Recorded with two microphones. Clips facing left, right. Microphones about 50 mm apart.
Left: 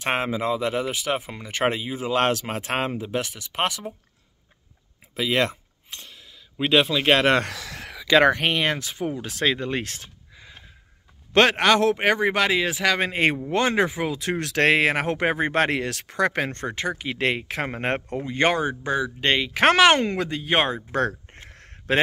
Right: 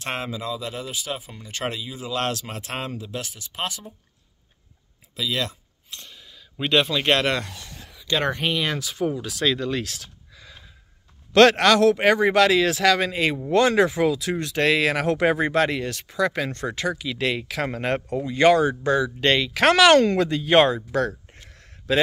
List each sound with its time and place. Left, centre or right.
0.0 s speech: left
1.6 s speech: left
5.1 s a sound: left
6.0 s a sound: centre
7.4 s speech: left
8.5 s speech: left; by 13.0 s centre
13.0 s speech: left
13.5 s speech: left
14.1 s speech: left
14.4 s speech: left
14.7 s speech: left
15.7 s speech: left; by 20.7 s centre
20.7 s a sound: left